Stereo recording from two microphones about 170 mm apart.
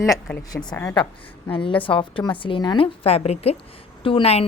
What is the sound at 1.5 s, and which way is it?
A woman's voice, 30° left (ahead or behind).